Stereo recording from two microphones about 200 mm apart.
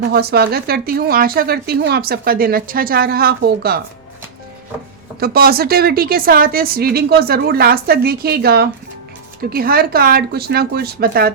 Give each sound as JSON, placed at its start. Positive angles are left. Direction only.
{"t": 0.1, "sound": "speech", "side_deg": -50}
{"t": 5.2, "sound": "speech", "side_deg": -50}